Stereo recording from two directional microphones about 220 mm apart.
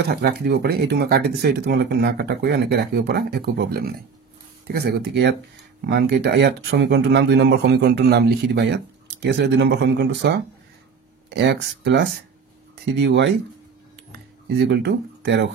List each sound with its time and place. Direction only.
0.1 s speech: 45° right (ahead or behind)
14.6 s speech: 50° right (ahead or behind)